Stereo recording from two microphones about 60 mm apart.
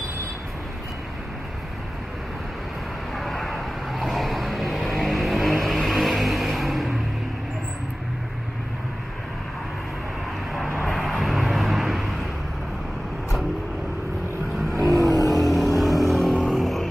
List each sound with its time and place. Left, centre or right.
3.2 s vehicle: centre
10.8 s vehicle: centre
14.9 s vehicle: right
15.3 s vehicle: centre
16.4 s music: centre